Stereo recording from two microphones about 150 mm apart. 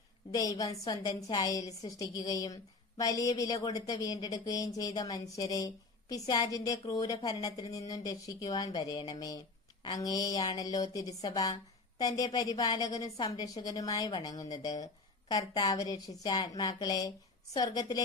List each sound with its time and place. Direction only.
0.6 s speech: 25° left (ahead or behind)